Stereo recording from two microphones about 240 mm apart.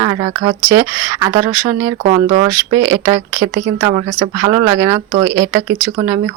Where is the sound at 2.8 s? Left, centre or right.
Centre.